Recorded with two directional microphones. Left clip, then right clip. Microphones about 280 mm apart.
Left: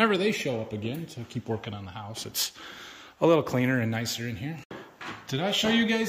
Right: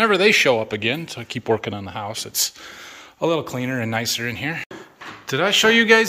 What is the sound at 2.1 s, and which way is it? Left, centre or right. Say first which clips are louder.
Speech: right 5 dB; centre.